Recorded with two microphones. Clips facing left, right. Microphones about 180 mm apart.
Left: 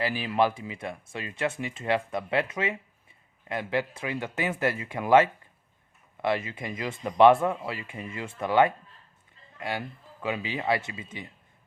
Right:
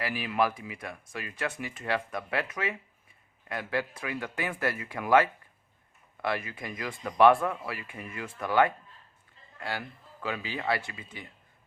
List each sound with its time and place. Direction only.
0.0 s speech: 30° left (ahead or behind)